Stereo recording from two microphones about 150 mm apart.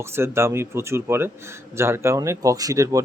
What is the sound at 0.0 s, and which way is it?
Speech, 15° right (ahead or behind).